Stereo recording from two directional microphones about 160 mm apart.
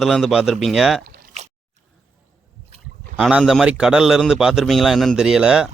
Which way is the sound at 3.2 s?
5° right (ahead or behind).